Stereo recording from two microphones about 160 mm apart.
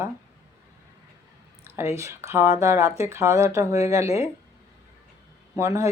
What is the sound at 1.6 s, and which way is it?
Speech, 15° right (ahead or behind).